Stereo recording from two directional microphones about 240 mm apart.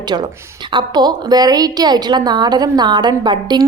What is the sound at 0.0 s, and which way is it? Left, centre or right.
A woman's voice, centre.